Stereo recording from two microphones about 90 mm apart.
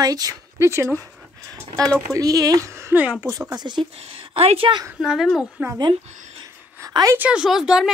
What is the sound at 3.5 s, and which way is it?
Speech, 55° right (ahead or behind).